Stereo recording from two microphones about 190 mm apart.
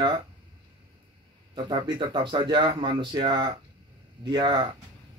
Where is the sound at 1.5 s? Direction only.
25° right (ahead or behind).